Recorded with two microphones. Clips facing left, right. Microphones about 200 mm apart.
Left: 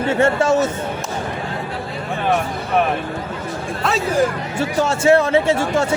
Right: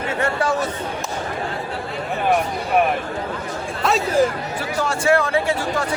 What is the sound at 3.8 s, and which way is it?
Speech, centre (ahead or behind).